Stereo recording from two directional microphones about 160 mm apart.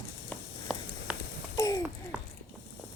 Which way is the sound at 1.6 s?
20° left (ahead or behind).